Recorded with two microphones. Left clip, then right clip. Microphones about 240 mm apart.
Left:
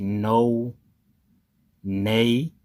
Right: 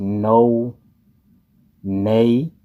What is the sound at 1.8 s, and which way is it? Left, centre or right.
Speech, left.